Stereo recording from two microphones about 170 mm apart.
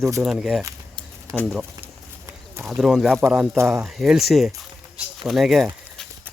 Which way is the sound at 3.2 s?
10° right (ahead or behind).